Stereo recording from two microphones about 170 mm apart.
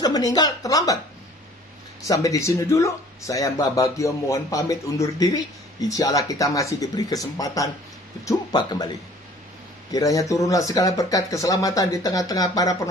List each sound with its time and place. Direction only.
0.0 s speech: 20° left (ahead or behind)
2.0 s speech: 20° left (ahead or behind)